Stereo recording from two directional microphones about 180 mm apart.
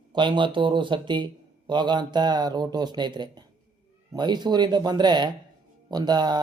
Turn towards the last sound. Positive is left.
turn(degrees=-25)  # may be behind; listen again after turning